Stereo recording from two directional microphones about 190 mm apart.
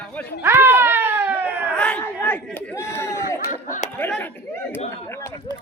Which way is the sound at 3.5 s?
40° left (ahead or behind).